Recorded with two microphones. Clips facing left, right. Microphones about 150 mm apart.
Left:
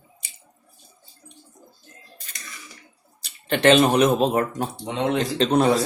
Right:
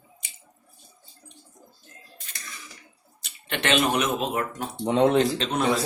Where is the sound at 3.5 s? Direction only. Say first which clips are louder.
Left 7 dB; 35° left (ahead or behind).